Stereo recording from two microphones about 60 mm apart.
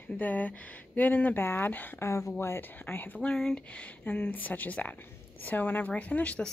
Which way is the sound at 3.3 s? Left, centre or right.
Centre.